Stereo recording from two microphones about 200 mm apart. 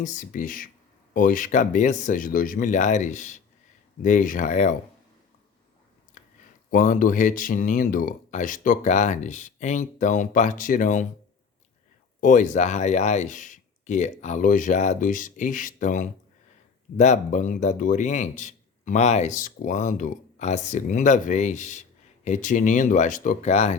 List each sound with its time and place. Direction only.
0.0 s a man's voice: 40° left (ahead or behind)
6.2 s a sound: 40° left (ahead or behind)
6.7 s a man's voice: 45° left (ahead or behind)
12.2 s a man's voice: 40° left (ahead or behind)